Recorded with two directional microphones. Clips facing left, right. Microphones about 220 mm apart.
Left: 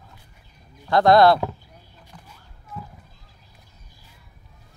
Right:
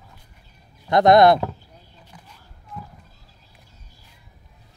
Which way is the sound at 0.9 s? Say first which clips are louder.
Right 1 dB; 20° right (ahead or behind).